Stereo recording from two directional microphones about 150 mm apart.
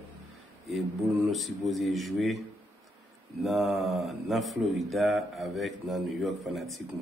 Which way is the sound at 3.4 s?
Centre (ahead or behind).